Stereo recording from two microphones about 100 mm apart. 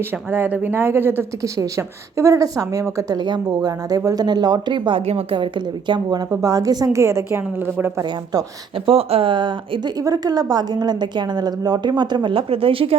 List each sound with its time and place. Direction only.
0.3 s speech: 20° right (ahead or behind); by 5.0 s 55° right (ahead or behind)
5.0 s a woman's voice: 65° right (ahead or behind)
5.9 s a woman's voice: 45° right (ahead or behind); by 8.0 s 25° right (ahead or behind)
8.9 s speech: 75° right (ahead or behind); by 9.9 s 55° right (ahead or behind)
10.0 s a woman's voice: 40° right (ahead or behind); by 13.0 s 65° right (ahead or behind)